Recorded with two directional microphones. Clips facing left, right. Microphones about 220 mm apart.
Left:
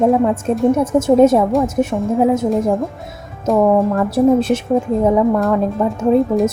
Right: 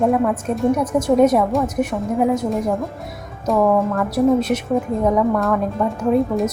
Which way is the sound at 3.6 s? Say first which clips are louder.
Left 3 dB; 30° left (ahead or behind).